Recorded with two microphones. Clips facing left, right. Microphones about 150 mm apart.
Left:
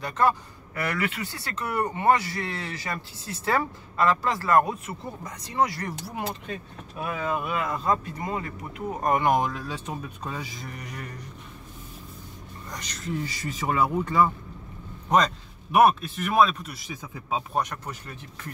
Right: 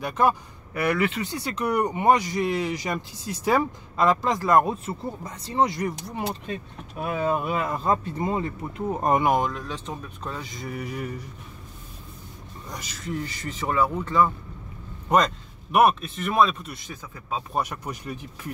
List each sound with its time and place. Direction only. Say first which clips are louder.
0.0 s speech: right 1 dB; 15° right (ahead or behind)
5.9 s speech: right 3 dB; centre (ahead or behind)
7.1 s speech: right 4 dB; 30° right (ahead or behind)
9.2 s speech: right 1 dB; centre (ahead or behind)
12.6 s speech: even; 5° right (ahead or behind)
13.3 s speech: even; 10° left (ahead or behind)
15.0 s speech: right 1 dB; centre (ahead or behind)
17.6 s speech: right 1 dB; 10° right (ahead or behind)